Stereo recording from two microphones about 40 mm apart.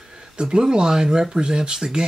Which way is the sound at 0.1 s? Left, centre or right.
Right.